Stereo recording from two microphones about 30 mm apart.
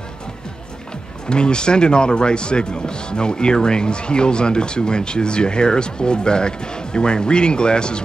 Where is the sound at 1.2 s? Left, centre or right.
Left.